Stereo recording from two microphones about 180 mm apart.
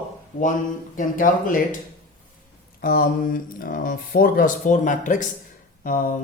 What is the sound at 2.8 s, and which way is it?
Speech, 55° left (ahead or behind).